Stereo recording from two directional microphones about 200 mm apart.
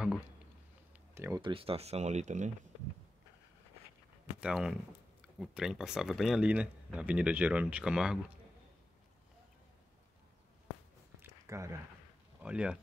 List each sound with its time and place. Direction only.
1.1 s speech: 15° right (ahead or behind)
1.4 s speech: 30° right (ahead or behind)
4.4 s speech: 5° right (ahead or behind)
11.2 s a sound: 15° right (ahead or behind)
12.4 s speech: 5° right (ahead or behind)